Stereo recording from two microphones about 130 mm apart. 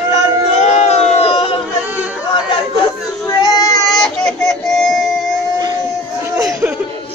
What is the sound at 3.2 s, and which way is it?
Child singing, 30° left (ahead or behind).